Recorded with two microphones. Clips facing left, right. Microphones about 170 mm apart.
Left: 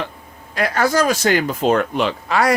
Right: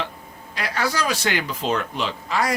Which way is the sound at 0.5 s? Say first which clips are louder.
Left 8 dB; 50° left (ahead or behind).